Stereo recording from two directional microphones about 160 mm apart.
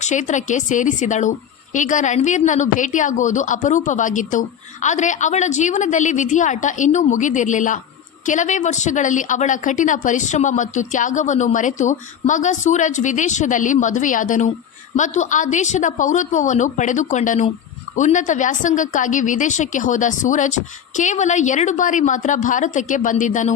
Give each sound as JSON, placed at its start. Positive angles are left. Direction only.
{"t": 0.0, "sound": "a woman's voice", "side_deg": 50}